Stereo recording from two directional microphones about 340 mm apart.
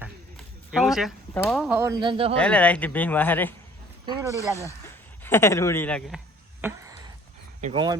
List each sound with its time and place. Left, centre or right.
0.0 s speech: centre
2.4 s speech: centre
4.0 s speech: centre
4.8 s speech: centre
6.6 s a sound: centre
7.6 s speech: centre